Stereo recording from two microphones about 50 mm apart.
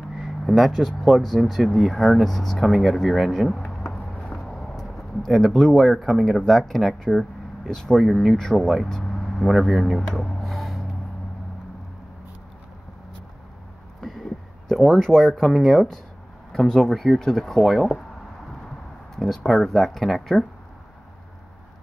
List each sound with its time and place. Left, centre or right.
0.2 s speech: centre
3.9 s a sound: centre
4.5 s speech: centre
8.0 s speech: centre
10.0 s rub: centre
14.7 s speech: centre
19.1 s speech: centre